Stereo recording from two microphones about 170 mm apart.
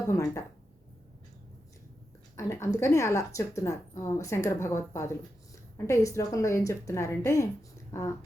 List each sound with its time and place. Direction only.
0.1 s a woman's voice: 20° left (ahead or behind)
2.3 s a woman's voice: 15° left (ahead or behind)